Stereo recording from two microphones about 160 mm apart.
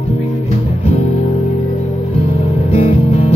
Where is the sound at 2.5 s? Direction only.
45° left (ahead or behind).